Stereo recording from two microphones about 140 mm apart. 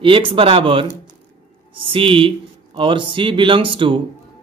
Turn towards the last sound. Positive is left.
turn(degrees=-40)  # may be behind; listen again after turning